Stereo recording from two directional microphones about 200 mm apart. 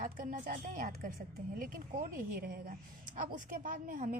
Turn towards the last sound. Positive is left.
turn(degrees=-45)  # may be behind; listen again after turning